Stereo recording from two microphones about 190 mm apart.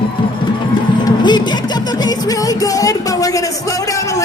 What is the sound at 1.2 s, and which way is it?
Music, 25° left (ahead or behind).